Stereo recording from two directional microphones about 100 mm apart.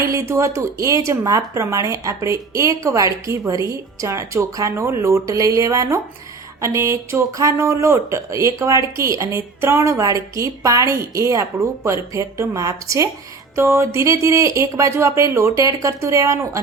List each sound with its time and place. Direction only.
0.1 s speech: 30° right (ahead or behind)